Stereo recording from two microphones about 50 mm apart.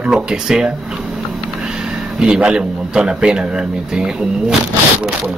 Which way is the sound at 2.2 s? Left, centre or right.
Centre.